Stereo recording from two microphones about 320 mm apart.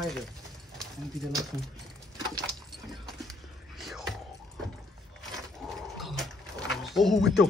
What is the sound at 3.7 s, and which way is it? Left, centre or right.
Whispering, centre.